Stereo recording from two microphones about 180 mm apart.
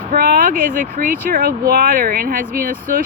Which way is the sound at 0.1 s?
55° right (ahead or behind).